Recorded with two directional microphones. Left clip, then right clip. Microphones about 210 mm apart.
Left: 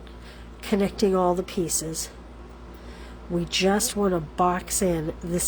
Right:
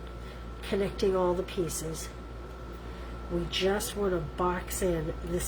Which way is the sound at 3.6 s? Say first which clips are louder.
Left 6 dB; 50° left (ahead or behind).